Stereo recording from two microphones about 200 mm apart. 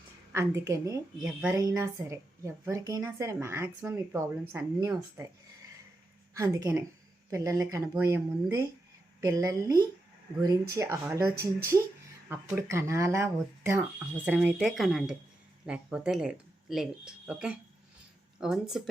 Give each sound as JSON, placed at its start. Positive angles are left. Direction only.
{"t": 0.3, "sound": "a woman's voice", "side_deg": -15}
{"t": 6.3, "sound": "a woman's voice", "side_deg": -15}
{"t": 12.3, "sound": "a woman's voice", "side_deg": -10}